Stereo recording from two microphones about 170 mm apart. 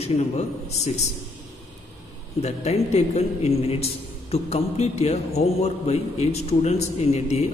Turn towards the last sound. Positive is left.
turn(degrees=40)  # may be behind; listen again after turning